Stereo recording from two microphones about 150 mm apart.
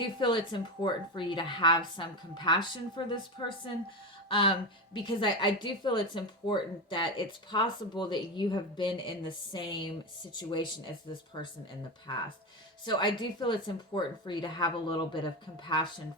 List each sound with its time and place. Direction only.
0.2 s a woman's voice: 30° left (ahead or behind)
12.8 s a woman's voice: 30° left (ahead or behind)